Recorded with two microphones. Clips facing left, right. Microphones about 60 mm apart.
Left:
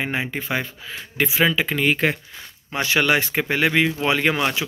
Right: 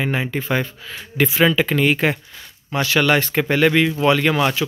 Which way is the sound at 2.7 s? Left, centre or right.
Left.